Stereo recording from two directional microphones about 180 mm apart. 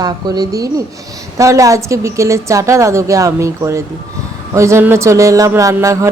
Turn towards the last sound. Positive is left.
turn(degrees=-15)  # may be behind; listen again after turning